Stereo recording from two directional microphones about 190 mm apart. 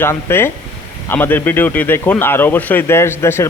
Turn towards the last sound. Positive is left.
turn(degrees=15)  # may be behind; listen again after turning